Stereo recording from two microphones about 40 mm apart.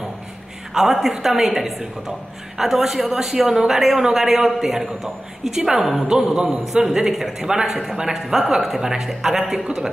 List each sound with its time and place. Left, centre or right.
0.9 s a woman's voice: centre
6.0 s a man's voice: centre